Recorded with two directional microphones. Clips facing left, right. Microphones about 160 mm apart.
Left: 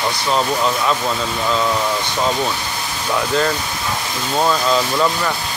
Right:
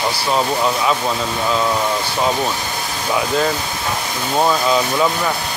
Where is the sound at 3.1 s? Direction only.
5° right (ahead or behind).